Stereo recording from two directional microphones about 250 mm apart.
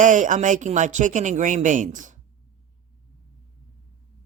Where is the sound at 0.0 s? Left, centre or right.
Right.